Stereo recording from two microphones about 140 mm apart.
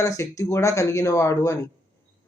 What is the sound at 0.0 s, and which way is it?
Speech, 25° left (ahead or behind).